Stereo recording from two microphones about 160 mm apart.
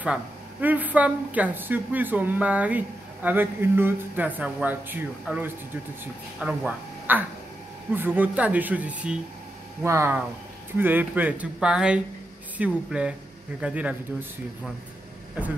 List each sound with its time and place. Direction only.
0.0 s a woman's voice: 10° right (ahead or behind)